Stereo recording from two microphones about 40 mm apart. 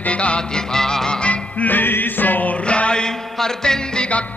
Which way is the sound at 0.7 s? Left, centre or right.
Centre.